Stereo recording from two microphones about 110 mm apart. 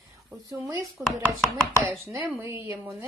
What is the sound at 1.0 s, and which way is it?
Speech, 10° right (ahead or behind).